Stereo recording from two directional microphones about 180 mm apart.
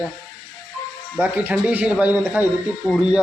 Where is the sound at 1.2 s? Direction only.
10° right (ahead or behind).